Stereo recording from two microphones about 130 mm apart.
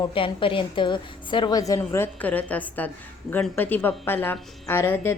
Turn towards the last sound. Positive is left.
turn(degrees=15)  # may be behind; listen again after turning